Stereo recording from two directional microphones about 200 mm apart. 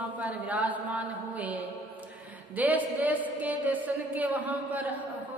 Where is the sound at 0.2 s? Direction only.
5° right (ahead or behind).